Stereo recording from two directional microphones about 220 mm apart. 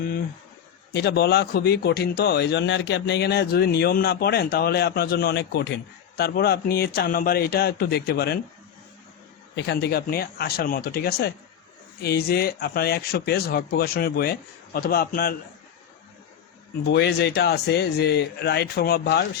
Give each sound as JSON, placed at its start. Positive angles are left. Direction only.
{"t": 0.9, "sound": "speech", "side_deg": 45}
{"t": 9.6, "sound": "speech", "side_deg": 50}
{"t": 16.8, "sound": "speech", "side_deg": 50}